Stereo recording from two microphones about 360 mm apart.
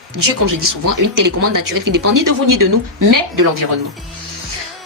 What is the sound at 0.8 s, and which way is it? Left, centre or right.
A woman's voice, right.